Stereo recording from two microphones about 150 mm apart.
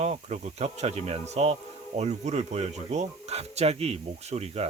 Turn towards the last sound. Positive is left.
turn(degrees=-45)  # may be behind; listen again after turning